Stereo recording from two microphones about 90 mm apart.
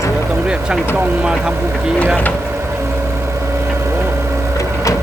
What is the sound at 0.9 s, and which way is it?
Speech, 15° right (ahead or behind).